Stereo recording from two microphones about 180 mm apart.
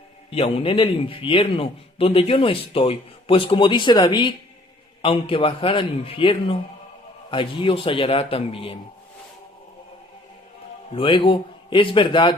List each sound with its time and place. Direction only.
0.3 s a man's voice: 30° left (ahead or behind)
10.9 s a man's voice: 30° left (ahead or behind)